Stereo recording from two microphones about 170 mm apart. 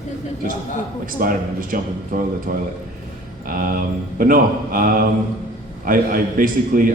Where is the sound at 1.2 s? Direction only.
55° right (ahead or behind).